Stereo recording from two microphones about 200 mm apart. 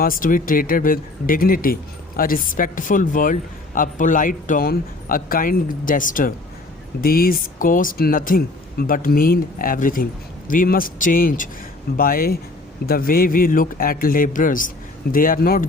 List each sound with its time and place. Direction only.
0.0 s speech: 45° left (ahead or behind)